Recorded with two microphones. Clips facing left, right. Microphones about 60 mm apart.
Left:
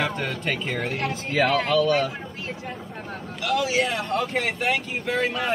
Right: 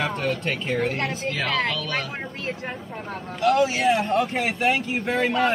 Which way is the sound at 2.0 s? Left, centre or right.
Right.